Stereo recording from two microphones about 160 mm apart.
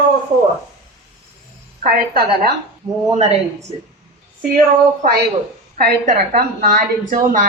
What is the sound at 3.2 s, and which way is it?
Speech, 45° right (ahead or behind).